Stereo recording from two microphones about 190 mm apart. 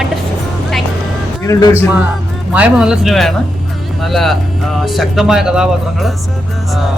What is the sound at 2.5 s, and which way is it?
Speech, 5° right (ahead or behind).